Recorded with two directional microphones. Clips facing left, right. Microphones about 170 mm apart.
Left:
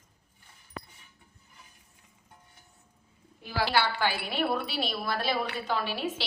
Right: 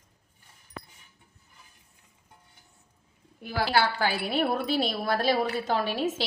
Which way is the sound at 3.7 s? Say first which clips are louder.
Right 3 dB; 40° right (ahead or behind).